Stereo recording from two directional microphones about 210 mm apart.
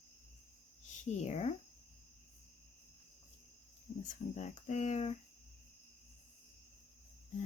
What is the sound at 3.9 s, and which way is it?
Speech, 35° left (ahead or behind).